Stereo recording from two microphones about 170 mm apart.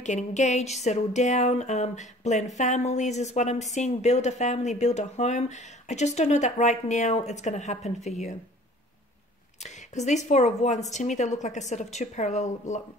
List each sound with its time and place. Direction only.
0.0 s speech: 45° left (ahead or behind)
9.6 s speech: 45° left (ahead or behind)